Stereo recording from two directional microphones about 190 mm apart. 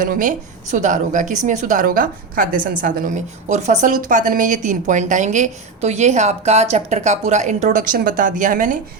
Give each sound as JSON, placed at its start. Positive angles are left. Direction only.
{"t": 0.0, "sound": "a woman's voice", "side_deg": -45}